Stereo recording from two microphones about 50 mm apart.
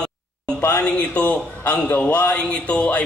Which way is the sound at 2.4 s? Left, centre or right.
Left.